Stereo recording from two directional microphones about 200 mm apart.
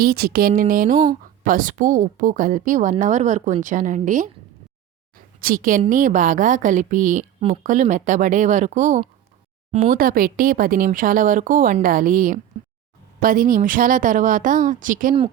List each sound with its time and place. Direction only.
0.0 s a woman's voice: 50° right (ahead or behind)
5.1 s a sound: 45° right (ahead or behind)
5.8 s a woman's voice: 40° right (ahead or behind)